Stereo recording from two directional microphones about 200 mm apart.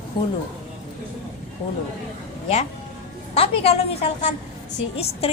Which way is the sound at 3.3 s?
30° left (ahead or behind).